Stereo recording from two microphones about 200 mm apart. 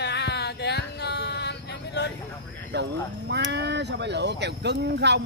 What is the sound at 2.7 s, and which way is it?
Speech, 60° right (ahead or behind).